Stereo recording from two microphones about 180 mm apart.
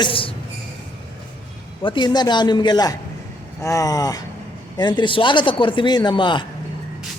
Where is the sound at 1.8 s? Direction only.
25° left (ahead or behind).